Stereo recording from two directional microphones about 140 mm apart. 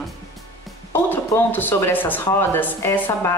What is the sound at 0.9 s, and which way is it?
Speech, 15° left (ahead or behind).